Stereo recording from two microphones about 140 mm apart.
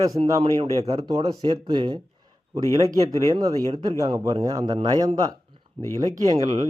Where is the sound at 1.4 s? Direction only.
30° right (ahead or behind).